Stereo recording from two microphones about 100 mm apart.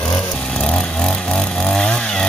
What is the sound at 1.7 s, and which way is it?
Chainsaw, 5° left (ahead or behind).